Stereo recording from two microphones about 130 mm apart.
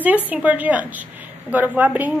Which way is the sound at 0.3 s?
10° right (ahead or behind).